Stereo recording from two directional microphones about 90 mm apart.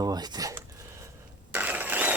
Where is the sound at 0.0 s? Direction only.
45° right (ahead or behind).